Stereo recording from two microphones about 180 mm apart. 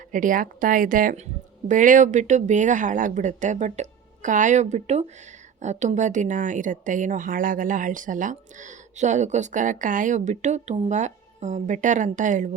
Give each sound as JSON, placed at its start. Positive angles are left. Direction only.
{"t": 0.1, "sound": "a woman's voice", "side_deg": -45}